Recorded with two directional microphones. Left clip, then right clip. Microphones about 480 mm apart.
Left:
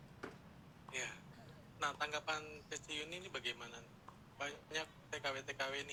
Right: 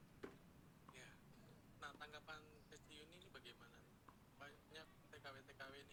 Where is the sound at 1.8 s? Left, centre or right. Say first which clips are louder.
Left 16 dB; left.